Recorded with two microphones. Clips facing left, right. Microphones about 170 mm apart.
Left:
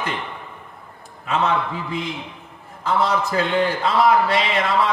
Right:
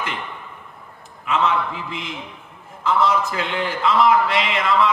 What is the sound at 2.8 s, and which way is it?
A man's voice, 35° left (ahead or behind).